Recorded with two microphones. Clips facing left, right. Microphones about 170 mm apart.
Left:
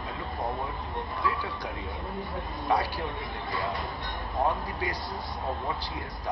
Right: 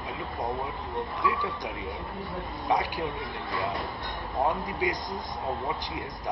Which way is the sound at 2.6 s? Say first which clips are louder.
Even; 15° right (ahead or behind).